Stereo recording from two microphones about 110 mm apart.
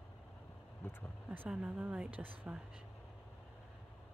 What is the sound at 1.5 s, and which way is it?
Speech, 5° right (ahead or behind).